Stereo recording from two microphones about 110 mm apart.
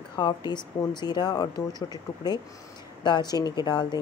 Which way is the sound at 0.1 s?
40° left (ahead or behind).